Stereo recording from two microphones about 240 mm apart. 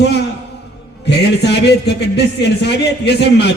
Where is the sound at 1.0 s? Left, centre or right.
Left.